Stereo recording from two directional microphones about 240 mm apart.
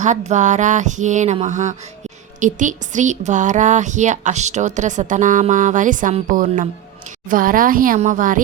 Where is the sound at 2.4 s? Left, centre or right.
Right.